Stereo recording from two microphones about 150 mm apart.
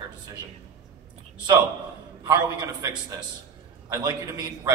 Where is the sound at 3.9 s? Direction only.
25° right (ahead or behind).